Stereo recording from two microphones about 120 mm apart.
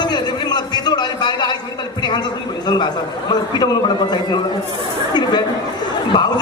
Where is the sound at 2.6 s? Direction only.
35° left (ahead or behind).